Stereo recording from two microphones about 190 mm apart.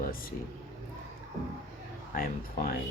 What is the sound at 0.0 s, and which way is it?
Speech, 50° left (ahead or behind).